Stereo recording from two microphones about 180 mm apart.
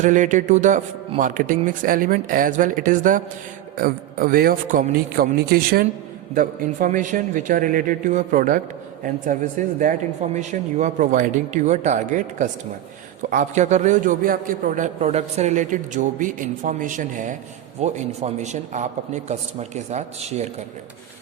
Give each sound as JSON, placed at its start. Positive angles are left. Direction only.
{"t": 0.0, "sound": "a man's voice", "side_deg": -45}